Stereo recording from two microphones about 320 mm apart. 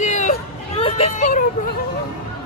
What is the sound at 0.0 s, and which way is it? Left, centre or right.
Hubbub, left.